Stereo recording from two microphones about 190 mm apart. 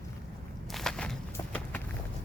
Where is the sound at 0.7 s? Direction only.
Centre (ahead or behind).